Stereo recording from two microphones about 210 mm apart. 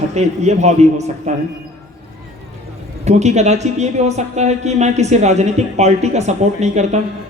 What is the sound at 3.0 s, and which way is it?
Speech, 30° right (ahead or behind).